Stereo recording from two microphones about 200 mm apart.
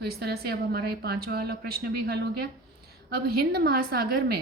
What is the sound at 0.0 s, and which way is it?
A woman's voice, 55° right (ahead or behind).